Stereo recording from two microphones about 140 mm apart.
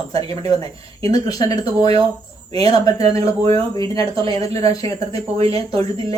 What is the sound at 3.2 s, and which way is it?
Speech, 45° right (ahead or behind).